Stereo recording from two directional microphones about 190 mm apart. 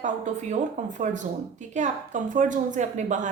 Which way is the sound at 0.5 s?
40° right (ahead or behind).